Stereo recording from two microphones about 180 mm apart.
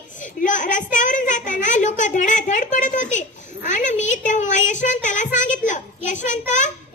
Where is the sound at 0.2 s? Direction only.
45° left (ahead or behind).